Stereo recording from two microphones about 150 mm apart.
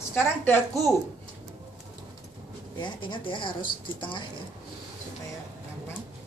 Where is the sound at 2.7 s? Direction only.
30° left (ahead or behind).